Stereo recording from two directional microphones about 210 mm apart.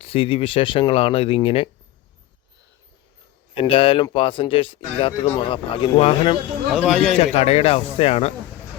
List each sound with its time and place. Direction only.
0.0 s speech: 25° left (ahead or behind)
3.5 s speech: 25° left (ahead or behind)
6.7 s a man's voice: 5° right (ahead or behind)
7.2 s speech: 30° left (ahead or behind)